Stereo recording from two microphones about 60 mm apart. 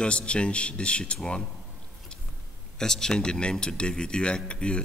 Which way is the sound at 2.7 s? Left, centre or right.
Centre.